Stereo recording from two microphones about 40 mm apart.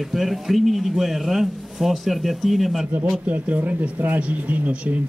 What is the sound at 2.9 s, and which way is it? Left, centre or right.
Speech, right.